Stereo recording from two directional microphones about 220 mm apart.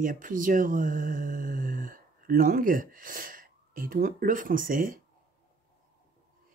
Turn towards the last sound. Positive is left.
turn(degrees=-40)  # may be behind; listen again after turning